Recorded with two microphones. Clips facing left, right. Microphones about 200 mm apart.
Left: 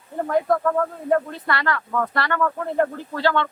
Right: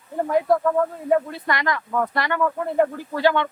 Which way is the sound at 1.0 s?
10° right (ahead or behind).